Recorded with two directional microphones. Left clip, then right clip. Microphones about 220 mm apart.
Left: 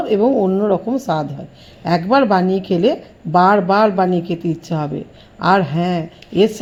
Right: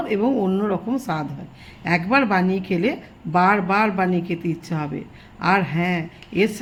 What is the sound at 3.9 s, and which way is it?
Speech, 20° left (ahead or behind).